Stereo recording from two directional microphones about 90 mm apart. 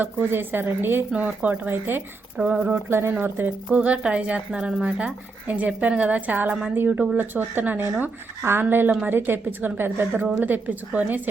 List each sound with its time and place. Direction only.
0.0 s speech: 25° right (ahead or behind)
2.9 s speech: 25° right (ahead or behind)